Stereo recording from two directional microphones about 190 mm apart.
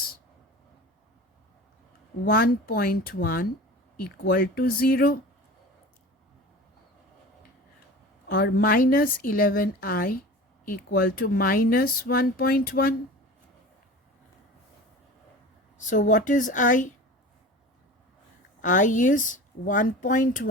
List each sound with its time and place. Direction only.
2.2 s speech: 50° left (ahead or behind)
8.3 s speech: 55° left (ahead or behind)
15.8 s speech: 40° left (ahead or behind)
18.6 s speech: 45° left (ahead or behind)